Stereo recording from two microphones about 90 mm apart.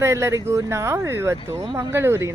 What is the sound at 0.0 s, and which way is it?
Speech, 30° right (ahead or behind).